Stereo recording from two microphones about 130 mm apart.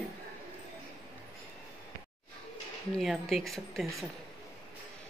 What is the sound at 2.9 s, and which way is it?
Speech, centre (ahead or behind).